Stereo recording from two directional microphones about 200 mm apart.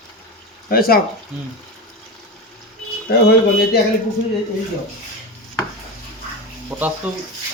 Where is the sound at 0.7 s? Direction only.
50° left (ahead or behind).